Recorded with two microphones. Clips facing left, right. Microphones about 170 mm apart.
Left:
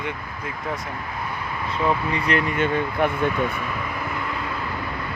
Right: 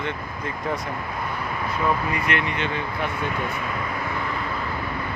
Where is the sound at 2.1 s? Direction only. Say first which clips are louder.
Left 3 dB; 35° left (ahead or behind).